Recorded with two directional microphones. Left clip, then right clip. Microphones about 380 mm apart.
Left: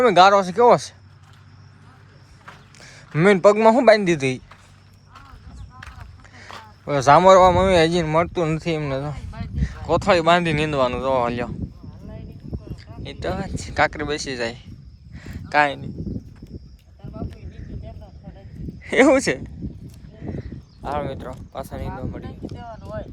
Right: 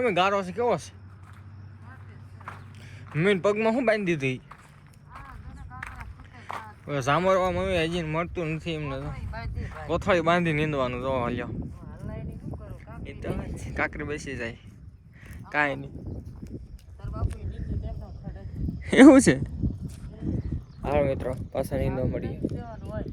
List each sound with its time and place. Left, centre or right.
0.1 s speech: centre
3.2 s speech: centre
6.3 s speech: centre
13.1 s speech: centre
15.1 s a sound: centre
18.8 s speech: centre
20.8 s speech: centre
21.9 s speech: right